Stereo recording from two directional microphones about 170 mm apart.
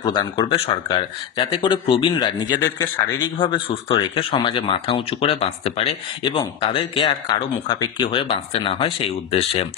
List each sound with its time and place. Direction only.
0.0 s speech: 25° left (ahead or behind)